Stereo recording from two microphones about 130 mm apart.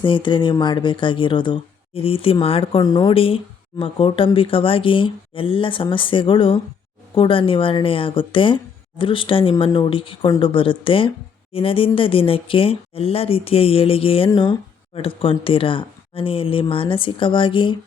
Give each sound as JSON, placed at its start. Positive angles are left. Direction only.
{"t": 0.0, "sound": "speech", "side_deg": 40}
{"t": 2.8, "sound": "speech", "side_deg": 35}